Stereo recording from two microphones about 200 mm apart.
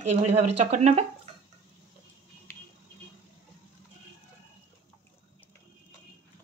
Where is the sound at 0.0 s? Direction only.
35° right (ahead or behind).